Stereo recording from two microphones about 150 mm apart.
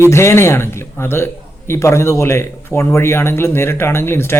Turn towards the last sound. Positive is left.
turn(degrees=15)  # may be behind; listen again after turning